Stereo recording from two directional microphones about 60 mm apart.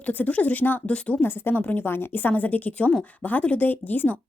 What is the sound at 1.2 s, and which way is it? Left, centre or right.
Speech, left.